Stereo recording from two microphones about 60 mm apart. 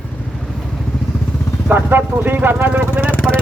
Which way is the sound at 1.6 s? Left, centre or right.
Right.